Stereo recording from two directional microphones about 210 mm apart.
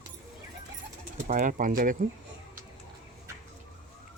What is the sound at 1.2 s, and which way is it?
Speech, 40° right (ahead or behind).